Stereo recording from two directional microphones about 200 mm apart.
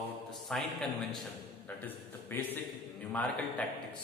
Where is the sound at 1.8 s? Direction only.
10° left (ahead or behind).